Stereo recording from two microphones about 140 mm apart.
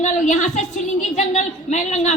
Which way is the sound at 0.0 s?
60° left (ahead or behind).